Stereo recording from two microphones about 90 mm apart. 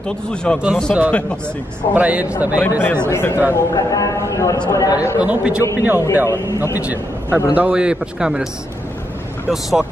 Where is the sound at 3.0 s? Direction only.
30° left (ahead or behind).